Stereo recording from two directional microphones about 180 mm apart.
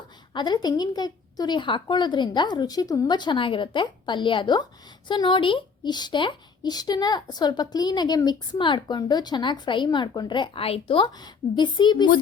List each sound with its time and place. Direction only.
0.3 s speech: 25° left (ahead or behind)